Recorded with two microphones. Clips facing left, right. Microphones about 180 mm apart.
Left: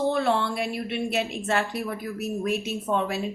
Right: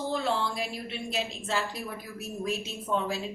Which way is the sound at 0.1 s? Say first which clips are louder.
Left 5 dB; 65° left (ahead or behind).